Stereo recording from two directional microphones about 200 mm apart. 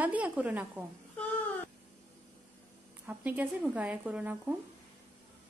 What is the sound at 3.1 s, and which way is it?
Speech, 5° right (ahead or behind).